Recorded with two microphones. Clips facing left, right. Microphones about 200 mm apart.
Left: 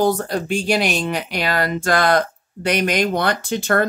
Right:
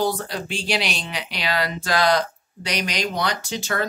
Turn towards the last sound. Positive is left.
turn(degrees=55)  # may be behind; listen again after turning